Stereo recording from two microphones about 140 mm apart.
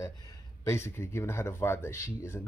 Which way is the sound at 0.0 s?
20° left (ahead or behind).